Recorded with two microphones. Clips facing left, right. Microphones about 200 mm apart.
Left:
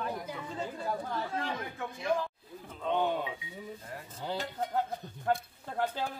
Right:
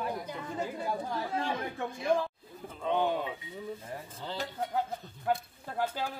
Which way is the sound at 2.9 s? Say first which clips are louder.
Right 1 dB; centre (ahead or behind).